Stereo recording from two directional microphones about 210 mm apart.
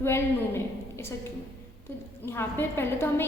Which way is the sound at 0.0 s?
10° left (ahead or behind).